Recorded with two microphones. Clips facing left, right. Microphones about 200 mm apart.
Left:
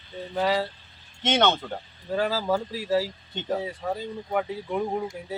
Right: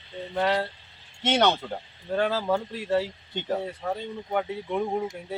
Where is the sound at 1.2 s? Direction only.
10° right (ahead or behind).